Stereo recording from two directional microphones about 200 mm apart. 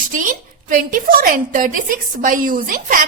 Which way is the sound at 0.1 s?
40° right (ahead or behind).